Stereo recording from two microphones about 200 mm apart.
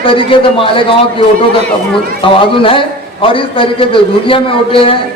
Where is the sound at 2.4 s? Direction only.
25° left (ahead or behind).